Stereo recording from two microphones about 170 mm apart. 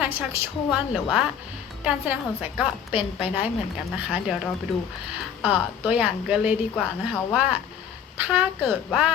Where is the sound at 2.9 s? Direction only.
30° left (ahead or behind).